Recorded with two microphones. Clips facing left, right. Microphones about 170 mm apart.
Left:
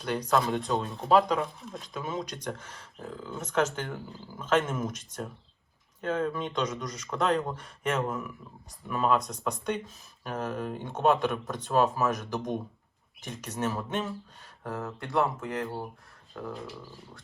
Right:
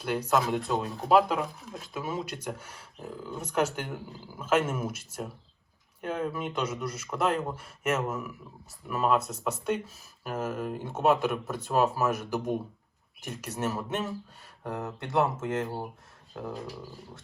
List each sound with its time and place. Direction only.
0.0 s speech: 5° right (ahead or behind)
14.6 s speech: 15° right (ahead or behind)
15.0 s speech: centre (ahead or behind)